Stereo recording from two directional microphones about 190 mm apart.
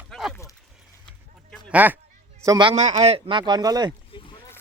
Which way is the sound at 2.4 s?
20° right (ahead or behind).